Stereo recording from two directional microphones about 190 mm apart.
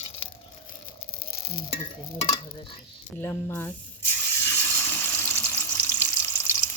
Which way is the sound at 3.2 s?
15° left (ahead or behind).